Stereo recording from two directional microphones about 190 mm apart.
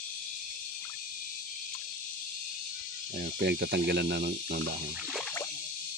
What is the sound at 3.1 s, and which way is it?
Speech, 55° right (ahead or behind).